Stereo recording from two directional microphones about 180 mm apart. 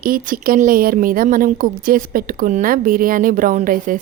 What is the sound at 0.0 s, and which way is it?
Speech, 50° right (ahead or behind).